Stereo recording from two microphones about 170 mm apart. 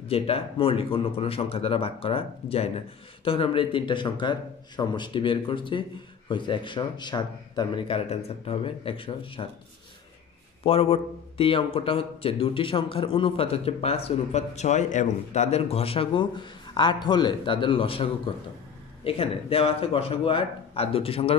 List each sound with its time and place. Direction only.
0.1 s a man's voice: 35° left (ahead or behind)
10.6 s a man's voice: 35° left (ahead or behind)